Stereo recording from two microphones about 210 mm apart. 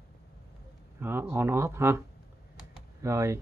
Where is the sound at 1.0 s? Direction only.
10° right (ahead or behind).